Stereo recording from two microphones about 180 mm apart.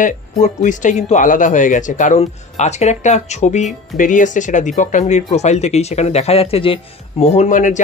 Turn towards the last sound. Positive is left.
turn(degrees=45)  # may be behind; listen again after turning